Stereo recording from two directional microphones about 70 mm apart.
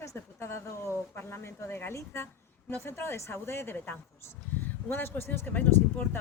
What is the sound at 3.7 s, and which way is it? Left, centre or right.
Speech, left.